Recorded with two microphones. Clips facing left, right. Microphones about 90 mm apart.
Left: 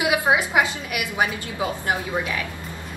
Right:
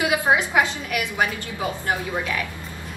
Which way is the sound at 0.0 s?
20° left (ahead or behind).